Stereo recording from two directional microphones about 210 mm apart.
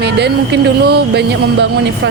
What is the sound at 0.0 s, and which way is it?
Speech, 55° right (ahead or behind).